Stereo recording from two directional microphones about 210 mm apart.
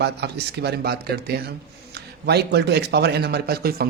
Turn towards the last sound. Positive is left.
turn(degrees=-45)  # may be behind; listen again after turning